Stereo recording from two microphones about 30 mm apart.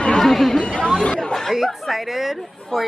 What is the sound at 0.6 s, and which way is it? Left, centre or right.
Chatter, left.